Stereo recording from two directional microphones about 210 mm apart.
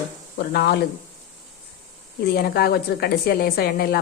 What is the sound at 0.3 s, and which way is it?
Speech, 50° left (ahead or behind).